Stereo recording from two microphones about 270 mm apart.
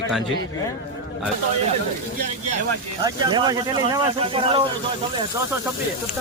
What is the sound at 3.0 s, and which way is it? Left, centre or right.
Speech, centre.